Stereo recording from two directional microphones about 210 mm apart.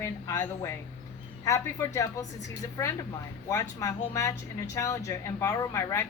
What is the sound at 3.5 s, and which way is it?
A woman's voice, 15° left (ahead or behind).